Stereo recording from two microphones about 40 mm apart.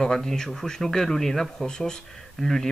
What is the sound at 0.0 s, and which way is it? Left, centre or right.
Speech, centre.